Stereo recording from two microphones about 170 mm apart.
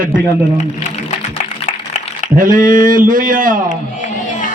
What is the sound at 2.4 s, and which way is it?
A man's voice, 50° right (ahead or behind).